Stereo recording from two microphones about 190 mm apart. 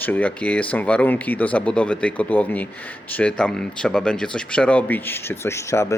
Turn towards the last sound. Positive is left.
turn(degrees=15)  # may be behind; listen again after turning